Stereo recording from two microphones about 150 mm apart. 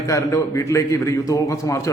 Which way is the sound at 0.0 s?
20° left (ahead or behind).